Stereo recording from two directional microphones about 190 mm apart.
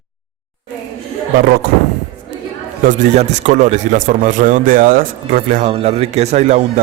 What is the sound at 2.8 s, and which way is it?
Speech, 40° right (ahead or behind).